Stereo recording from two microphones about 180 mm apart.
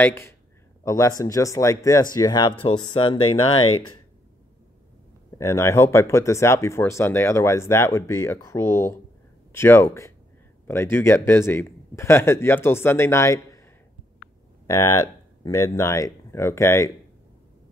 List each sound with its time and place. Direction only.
0.0 s speech: 15° left (ahead or behind)
5.4 s speech: 15° left (ahead or behind)
14.7 s speech: 15° left (ahead or behind)